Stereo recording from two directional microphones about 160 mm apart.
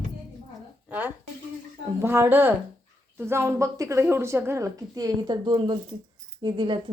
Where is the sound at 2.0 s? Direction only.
15° right (ahead or behind).